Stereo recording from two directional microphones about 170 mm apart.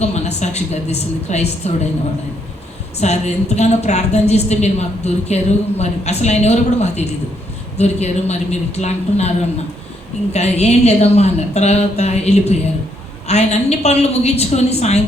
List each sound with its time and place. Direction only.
0.0 s a woman's voice: 40° left (ahead or behind)
3.0 s a woman's voice: 40° left (ahead or behind)
10.3 s a woman's voice: 40° left (ahead or behind)